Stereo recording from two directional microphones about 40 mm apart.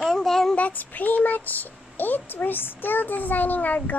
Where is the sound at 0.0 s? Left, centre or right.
Centre.